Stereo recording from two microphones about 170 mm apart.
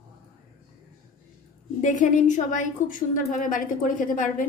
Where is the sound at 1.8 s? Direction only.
50° left (ahead or behind).